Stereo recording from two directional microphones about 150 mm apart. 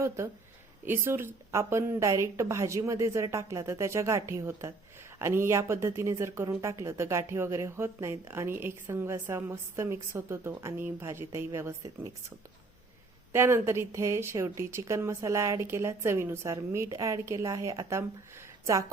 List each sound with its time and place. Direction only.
0.9 s speech: 15° right (ahead or behind)
13.3 s a woman's voice: 15° right (ahead or behind)